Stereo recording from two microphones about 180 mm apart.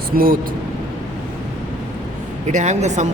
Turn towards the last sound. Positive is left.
turn(degrees=-40)  # may be behind; listen again after turning